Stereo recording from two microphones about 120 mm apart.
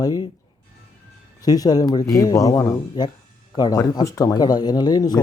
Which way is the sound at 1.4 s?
30° left (ahead or behind).